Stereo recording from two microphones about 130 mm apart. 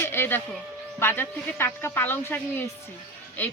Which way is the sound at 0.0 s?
15° left (ahead or behind).